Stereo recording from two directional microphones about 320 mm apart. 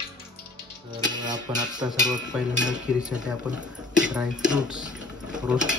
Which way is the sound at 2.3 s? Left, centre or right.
Centre.